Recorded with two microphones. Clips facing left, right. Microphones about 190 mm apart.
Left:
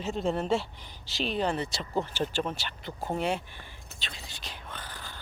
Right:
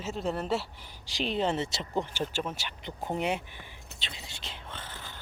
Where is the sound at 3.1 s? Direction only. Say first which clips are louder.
Left 1 dB; 15° right (ahead or behind).